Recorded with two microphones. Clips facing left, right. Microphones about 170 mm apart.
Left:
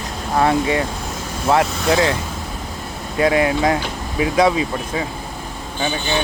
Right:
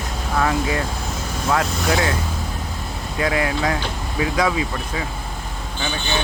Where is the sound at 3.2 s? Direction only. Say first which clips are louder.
Left 5 dB; 25° left (ahead or behind).